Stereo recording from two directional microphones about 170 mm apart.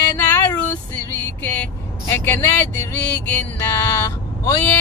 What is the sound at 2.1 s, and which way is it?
Speech, 10° left (ahead or behind).